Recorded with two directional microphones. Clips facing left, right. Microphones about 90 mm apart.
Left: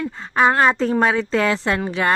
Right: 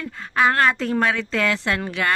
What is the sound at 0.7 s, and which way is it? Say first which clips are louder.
Speech: left 3 dB; 30° left (ahead or behind).